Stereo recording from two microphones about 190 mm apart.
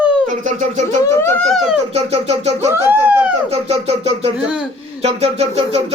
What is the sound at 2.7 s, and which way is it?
Speech, 15° right (ahead or behind).